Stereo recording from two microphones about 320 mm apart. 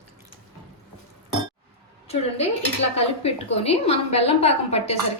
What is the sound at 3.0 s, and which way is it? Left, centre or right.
A woman's voice, centre.